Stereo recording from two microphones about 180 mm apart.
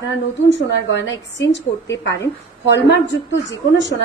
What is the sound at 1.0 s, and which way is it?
A woman's voice, 85° left.